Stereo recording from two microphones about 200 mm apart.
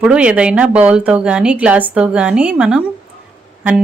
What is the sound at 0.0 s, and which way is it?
A woman's voice, 5° right (ahead or behind).